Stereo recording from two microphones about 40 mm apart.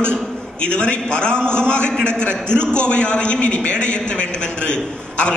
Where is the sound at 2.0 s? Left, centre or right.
Right.